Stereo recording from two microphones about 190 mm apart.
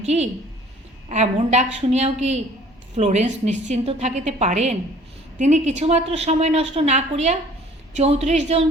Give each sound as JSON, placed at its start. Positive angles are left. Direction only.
{"t": 0.0, "sound": "a woman's voice", "side_deg": -35}